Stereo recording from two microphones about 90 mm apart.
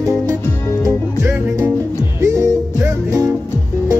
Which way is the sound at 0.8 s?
35° right (ahead or behind).